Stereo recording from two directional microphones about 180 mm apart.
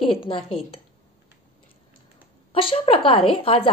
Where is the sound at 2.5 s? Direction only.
30° left (ahead or behind).